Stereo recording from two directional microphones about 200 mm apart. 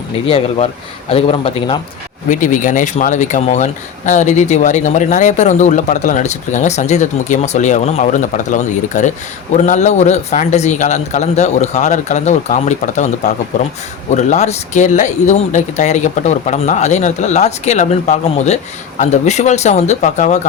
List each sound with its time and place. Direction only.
0.3 s a man's voice: 30° left (ahead or behind)
2.3 s speech: 40° left (ahead or behind)